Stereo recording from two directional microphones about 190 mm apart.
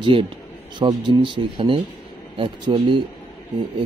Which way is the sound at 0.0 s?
25° right (ahead or behind).